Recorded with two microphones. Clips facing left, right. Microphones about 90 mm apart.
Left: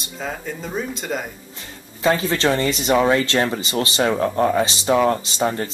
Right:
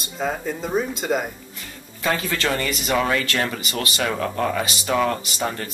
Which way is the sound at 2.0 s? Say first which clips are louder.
Left 5 dB; 25° left (ahead or behind).